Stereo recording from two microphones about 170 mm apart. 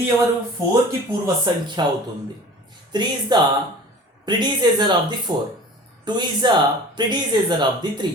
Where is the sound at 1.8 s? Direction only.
25° right (ahead or behind).